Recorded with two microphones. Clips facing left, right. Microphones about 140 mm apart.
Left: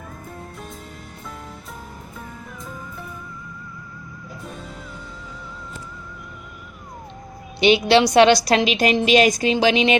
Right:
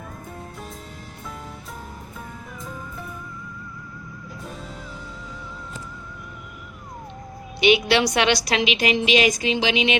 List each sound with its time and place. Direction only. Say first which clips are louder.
7.6 s a woman's voice: left 3 dB; 30° left (ahead or behind)